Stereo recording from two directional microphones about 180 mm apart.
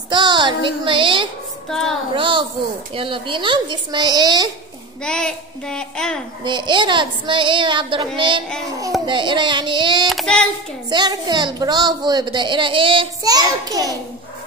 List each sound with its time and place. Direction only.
0.1 s a woman's voice: 25° right (ahead or behind)
1.7 s a child's voice: centre (ahead or behind)
2.1 s a woman's voice: 25° right (ahead or behind)
5.0 s a child's voice: 5° left (ahead or behind)
6.4 s a woman's voice: 25° right (ahead or behind)
10.0 s a child's voice: centre (ahead or behind)
10.9 s a woman's voice: 25° right (ahead or behind)